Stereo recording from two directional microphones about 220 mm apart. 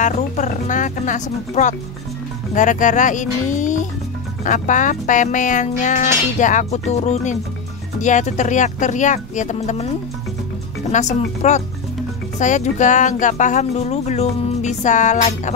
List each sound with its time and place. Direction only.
0.0 s speech: 35° left (ahead or behind)
10.9 s speech: 30° left (ahead or behind)